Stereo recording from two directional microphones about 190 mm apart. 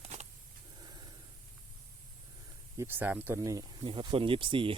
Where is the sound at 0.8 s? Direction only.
20° right (ahead or behind).